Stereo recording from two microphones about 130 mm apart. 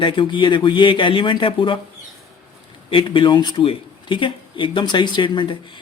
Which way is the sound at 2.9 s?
40° left (ahead or behind).